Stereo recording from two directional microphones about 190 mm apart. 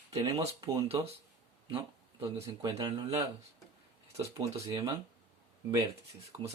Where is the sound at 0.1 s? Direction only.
30° right (ahead or behind).